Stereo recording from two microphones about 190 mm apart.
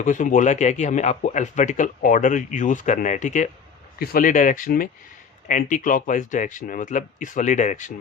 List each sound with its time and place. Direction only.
0.0 s speech: 40° left (ahead or behind)
3.9 s speech: 50° left (ahead or behind)